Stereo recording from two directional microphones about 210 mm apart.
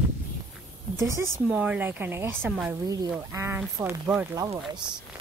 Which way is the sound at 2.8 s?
20° right (ahead or behind).